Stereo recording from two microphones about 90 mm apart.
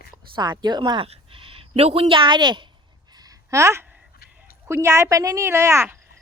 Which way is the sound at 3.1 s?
45° right (ahead or behind).